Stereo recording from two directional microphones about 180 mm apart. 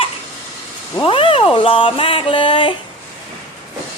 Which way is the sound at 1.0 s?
30° left (ahead or behind).